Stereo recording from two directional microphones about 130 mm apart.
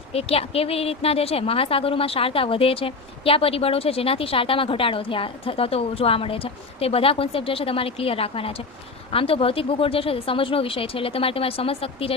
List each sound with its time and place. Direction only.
0.1 s a woman's voice: 50° left (ahead or behind)